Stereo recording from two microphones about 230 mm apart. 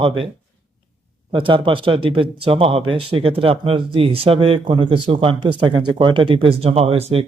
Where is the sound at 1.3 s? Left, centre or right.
Right.